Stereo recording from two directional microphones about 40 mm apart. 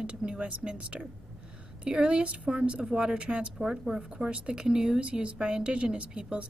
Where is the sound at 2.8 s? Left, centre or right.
Centre.